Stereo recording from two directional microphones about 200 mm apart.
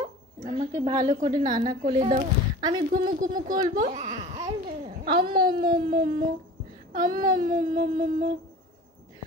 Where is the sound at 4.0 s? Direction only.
25° right (ahead or behind).